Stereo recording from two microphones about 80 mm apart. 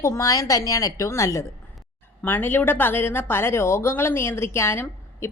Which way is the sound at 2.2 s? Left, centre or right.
Left.